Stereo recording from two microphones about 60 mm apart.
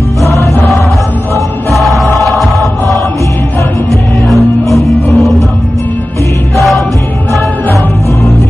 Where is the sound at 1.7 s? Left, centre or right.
Centre.